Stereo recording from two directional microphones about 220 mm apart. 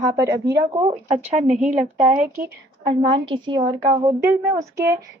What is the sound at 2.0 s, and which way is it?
A woman's voice, 35° right (ahead or behind).